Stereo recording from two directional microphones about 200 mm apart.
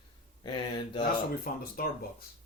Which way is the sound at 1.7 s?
50° left (ahead or behind).